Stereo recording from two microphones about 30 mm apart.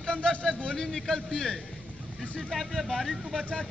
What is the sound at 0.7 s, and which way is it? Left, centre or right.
Speech, centre.